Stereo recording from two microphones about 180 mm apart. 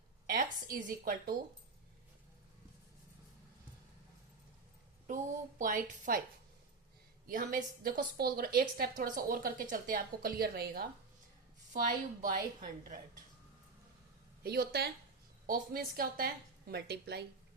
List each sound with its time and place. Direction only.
0.3 s a woman's voice: 50° right (ahead or behind)
5.0 s a woman's voice: 45° right (ahead or behind)
7.3 s a woman's voice: 50° right (ahead or behind)
11.7 s a woman's voice: 45° right (ahead or behind)
14.4 s a woman's voice: 60° right (ahead or behind)